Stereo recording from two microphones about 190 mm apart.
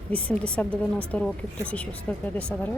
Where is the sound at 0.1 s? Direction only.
5° left (ahead or behind).